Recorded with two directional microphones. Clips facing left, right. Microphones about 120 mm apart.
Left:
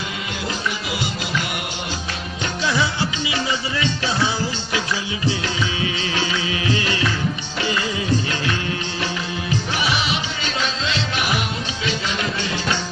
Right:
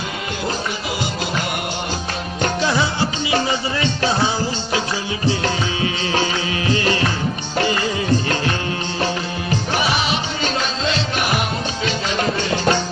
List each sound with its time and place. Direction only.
2.6 s music: 35° right (ahead or behind)
5.4 s music: 45° right (ahead or behind)
12.1 s music: 40° right (ahead or behind)